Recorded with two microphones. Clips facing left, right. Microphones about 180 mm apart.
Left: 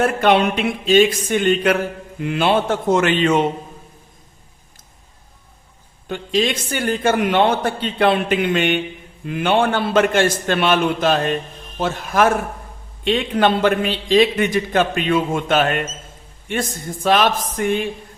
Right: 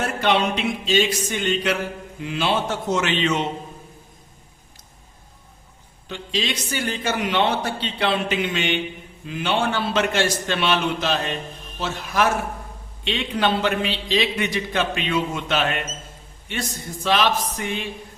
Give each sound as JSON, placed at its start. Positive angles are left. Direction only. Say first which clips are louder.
{"t": 0.0, "sound": "a man's voice", "louder": "left 6 dB", "side_deg": 55}
{"t": 6.1, "sound": "a man's voice", "louder": "left 7 dB", "side_deg": 50}